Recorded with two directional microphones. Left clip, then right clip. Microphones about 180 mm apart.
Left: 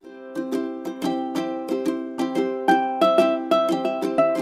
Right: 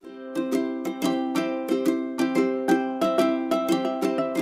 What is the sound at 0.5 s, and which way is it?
Music, 15° left (ahead or behind).